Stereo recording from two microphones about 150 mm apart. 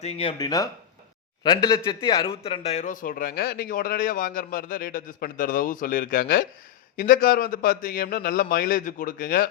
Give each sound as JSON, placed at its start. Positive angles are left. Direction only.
{"t": 0.0, "sound": "speech", "side_deg": 40}
{"t": 0.3, "sound": "a man's voice", "side_deg": 25}